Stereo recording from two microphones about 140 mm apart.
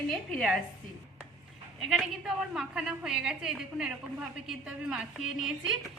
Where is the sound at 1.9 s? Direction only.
5° right (ahead or behind).